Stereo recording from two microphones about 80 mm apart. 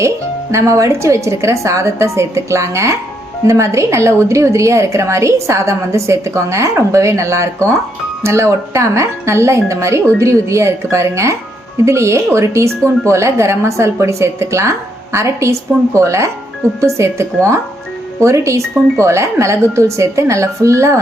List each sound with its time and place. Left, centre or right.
0.5 s speech: right